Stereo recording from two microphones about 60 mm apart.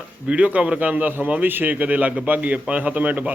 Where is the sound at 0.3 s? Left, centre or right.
Right.